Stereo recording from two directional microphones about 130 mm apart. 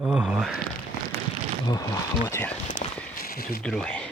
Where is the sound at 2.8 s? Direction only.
55° left (ahead or behind).